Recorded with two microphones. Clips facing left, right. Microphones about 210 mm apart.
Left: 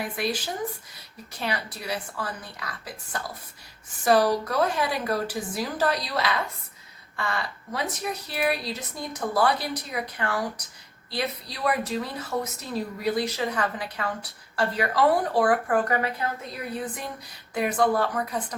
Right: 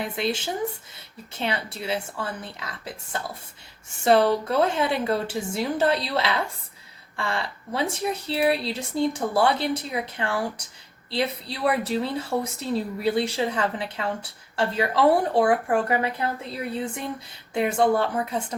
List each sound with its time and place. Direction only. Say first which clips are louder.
0.0 s a woman's voice: right 2 dB; 25° right (ahead or behind)